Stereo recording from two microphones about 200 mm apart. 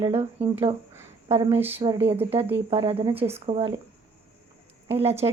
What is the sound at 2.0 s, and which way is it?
A woman's voice, 30° right (ahead or behind).